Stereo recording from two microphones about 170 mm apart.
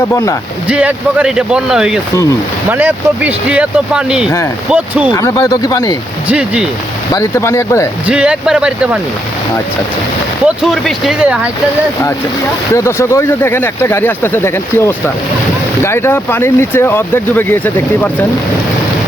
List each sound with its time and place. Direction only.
0.1 s speech: 20° left (ahead or behind)
0.7 s speech: 5° right (ahead or behind)
5.1 s speech: 20° left (ahead or behind)
6.2 s speech: 10° right (ahead or behind)
7.1 s speech: 15° left (ahead or behind)
8.0 s speech: 5° right (ahead or behind)
10.4 s speech: centre (ahead or behind)
12.7 s speech: 15° left (ahead or behind)